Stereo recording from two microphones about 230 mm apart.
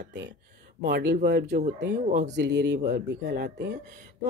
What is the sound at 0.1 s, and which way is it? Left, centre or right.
Speech, right.